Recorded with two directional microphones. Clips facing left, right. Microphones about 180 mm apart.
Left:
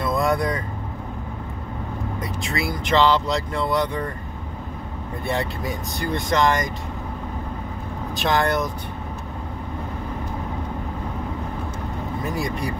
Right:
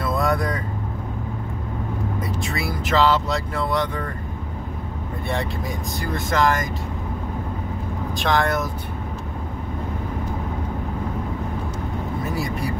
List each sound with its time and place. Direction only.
0.0 s vehicle: 5° right (ahead or behind)
2.4 s speech: centre (ahead or behind)
5.3 s speech: centre (ahead or behind)
8.2 s speech: centre (ahead or behind)
12.4 s speech: 5° right (ahead or behind)